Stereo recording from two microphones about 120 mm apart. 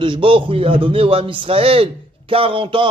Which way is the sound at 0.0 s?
45° right (ahead or behind).